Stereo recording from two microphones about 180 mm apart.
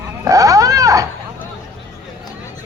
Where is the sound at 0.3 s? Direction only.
20° right (ahead or behind).